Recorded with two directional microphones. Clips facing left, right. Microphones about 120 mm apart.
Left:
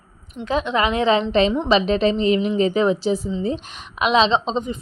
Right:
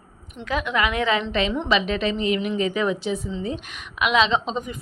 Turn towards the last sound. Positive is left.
turn(degrees=25)  # may be behind; listen again after turning